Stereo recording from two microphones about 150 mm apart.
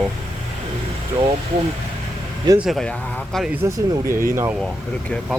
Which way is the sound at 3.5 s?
15° right (ahead or behind).